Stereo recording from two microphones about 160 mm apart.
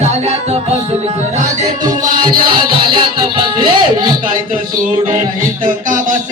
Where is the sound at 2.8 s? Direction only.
30° right (ahead or behind).